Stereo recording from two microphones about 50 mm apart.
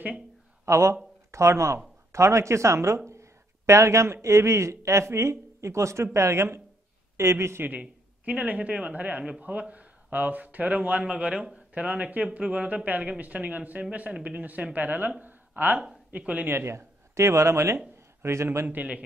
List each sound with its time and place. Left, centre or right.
0.7 s speech: right
7.8 s speech: right
11.7 s speech: right
16.4 s speech: right